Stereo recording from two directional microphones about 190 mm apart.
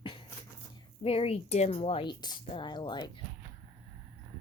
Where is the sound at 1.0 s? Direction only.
30° left (ahead or behind).